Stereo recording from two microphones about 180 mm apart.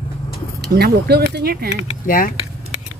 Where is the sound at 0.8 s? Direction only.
65° right (ahead or behind).